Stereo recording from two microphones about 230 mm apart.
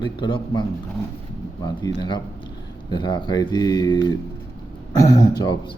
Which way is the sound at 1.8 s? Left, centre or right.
Centre.